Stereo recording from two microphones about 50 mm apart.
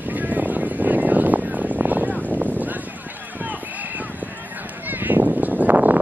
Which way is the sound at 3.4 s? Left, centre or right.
Right.